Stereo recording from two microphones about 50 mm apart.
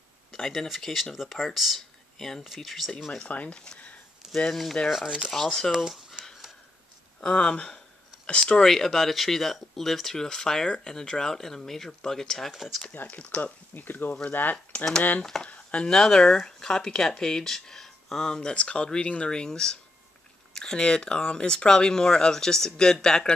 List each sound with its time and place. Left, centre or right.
0.4 s speech: centre
3.3 s speech: left
4.5 s speech: centre
5.0 s speech: centre
5.3 s speech: centre
5.7 s speech: centre
7.2 s speech: centre
13.0 s speech: left
15.4 s speech: left